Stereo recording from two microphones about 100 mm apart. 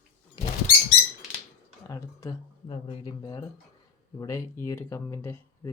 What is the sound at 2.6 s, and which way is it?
Speech, 55° left (ahead or behind).